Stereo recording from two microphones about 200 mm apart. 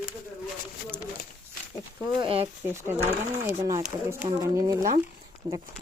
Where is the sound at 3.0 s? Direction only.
15° right (ahead or behind).